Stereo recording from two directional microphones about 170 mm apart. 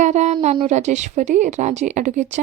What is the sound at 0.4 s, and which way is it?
A woman's voice, 35° right (ahead or behind).